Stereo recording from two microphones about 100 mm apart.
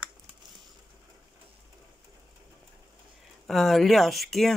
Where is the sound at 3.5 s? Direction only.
Centre (ahead or behind).